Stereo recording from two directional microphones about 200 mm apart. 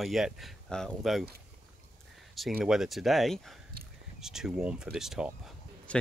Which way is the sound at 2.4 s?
Centre (ahead or behind).